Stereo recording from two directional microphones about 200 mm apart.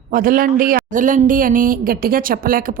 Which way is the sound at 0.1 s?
45° right (ahead or behind).